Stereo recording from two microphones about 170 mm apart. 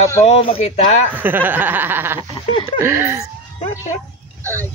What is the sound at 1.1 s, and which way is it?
Speech, 10° right (ahead or behind).